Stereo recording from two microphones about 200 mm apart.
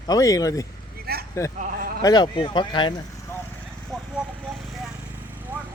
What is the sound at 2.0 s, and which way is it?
Speech, 20° left (ahead or behind).